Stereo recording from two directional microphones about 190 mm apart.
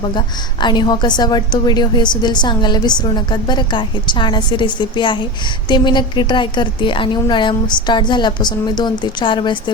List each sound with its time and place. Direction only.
0.6 s a woman's voice: 25° left (ahead or behind)